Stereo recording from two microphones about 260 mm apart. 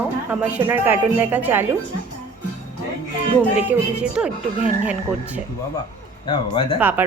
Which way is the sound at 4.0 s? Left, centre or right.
Centre.